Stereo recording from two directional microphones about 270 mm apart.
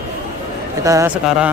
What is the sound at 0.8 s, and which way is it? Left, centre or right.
Speech, centre.